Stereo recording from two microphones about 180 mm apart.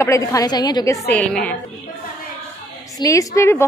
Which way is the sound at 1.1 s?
5° left (ahead or behind).